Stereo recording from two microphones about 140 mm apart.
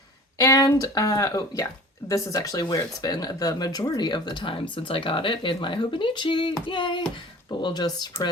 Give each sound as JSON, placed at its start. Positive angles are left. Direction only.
{"t": 0.3, "sound": "speech", "side_deg": 25}